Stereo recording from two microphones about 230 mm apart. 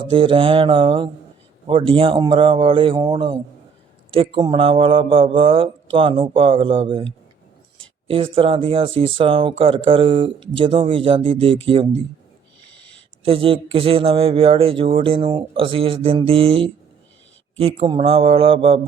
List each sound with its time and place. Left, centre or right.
0.1 s speech: right
13.2 s speech: right